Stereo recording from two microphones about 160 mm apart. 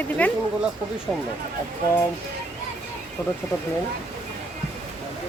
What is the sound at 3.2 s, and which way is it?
Speech, 15° left (ahead or behind).